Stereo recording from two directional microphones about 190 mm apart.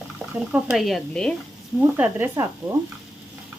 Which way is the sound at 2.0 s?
10° right (ahead or behind).